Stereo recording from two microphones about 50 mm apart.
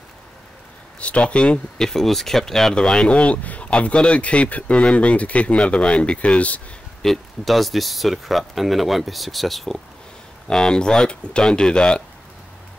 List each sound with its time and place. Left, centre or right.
0.9 s speech: left
1.8 s speech: centre; by 6.6 s left
7.0 s speech: centre
10.5 s speech: centre